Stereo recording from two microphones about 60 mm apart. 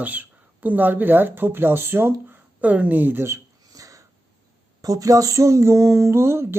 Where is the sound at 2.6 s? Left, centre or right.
Right.